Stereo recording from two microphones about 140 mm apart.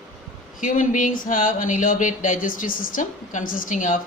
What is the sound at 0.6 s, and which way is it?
Speech, 70° left (ahead or behind).